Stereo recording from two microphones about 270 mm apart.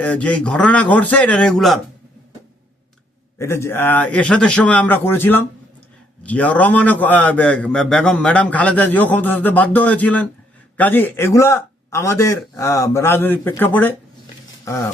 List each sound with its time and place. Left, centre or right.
0.0 s a man's voice: centre
3.3 s a man's voice: centre
14.6 s a sound: centre